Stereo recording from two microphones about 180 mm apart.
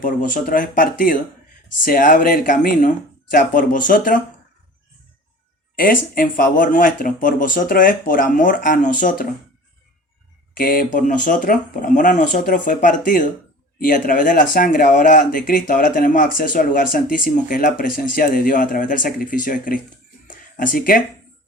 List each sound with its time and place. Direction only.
0.0 s speech: 45° left (ahead or behind)
5.7 s speech: 50° left (ahead or behind)
10.6 s speech: 50° left (ahead or behind)
20.2 s a sound: 50° left (ahead or behind)